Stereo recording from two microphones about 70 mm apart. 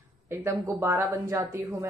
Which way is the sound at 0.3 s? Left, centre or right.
Right.